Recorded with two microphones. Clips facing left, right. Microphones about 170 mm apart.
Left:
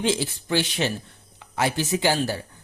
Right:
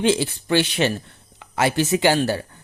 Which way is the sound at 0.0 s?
65° right (ahead or behind).